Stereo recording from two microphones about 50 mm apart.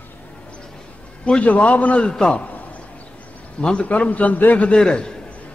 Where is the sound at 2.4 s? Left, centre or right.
Left.